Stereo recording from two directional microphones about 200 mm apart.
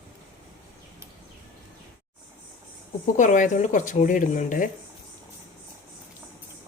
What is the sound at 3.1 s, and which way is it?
Speech, 40° left (ahead or behind).